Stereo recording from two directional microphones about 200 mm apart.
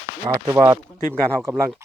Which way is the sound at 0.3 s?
15° right (ahead or behind).